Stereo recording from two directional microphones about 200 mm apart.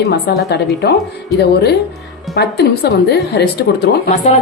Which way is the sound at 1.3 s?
55° left (ahead or behind).